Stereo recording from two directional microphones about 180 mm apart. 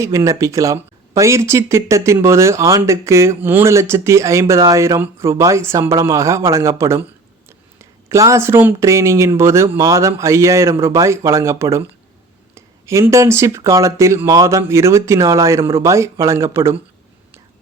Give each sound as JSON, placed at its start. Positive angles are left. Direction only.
{"t": 0.0, "sound": "speech", "side_deg": -15}